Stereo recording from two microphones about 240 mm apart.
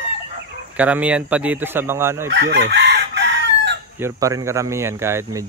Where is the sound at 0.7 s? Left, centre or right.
Centre.